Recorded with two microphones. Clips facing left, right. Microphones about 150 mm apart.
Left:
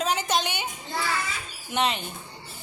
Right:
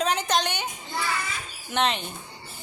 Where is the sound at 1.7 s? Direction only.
5° left (ahead or behind).